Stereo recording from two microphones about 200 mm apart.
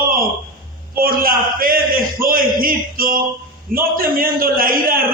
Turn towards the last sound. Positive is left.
turn(degrees=-45)  # may be behind; listen again after turning